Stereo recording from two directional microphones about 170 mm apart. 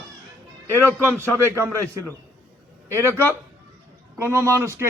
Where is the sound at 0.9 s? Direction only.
15° right (ahead or behind).